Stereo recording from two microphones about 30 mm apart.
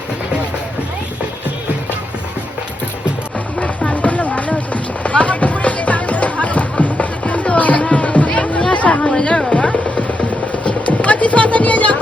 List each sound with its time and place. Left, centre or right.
3.6 s music: left
3.9 s music: left
8.7 s chatter: left
9.6 s music: left